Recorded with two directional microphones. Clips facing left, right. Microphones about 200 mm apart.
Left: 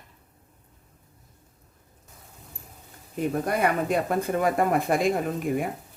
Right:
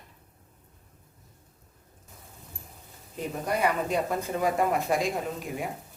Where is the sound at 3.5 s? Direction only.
55° left (ahead or behind).